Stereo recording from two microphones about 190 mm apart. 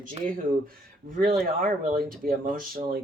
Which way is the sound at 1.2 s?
45° right (ahead or behind).